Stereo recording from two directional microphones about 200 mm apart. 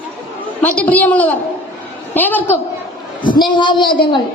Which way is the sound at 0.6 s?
10° left (ahead or behind).